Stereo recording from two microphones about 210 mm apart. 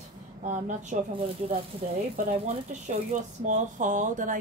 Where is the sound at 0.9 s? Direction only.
35° right (ahead or behind).